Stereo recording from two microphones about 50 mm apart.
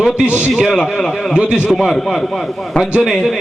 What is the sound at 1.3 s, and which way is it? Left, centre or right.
Speech, centre.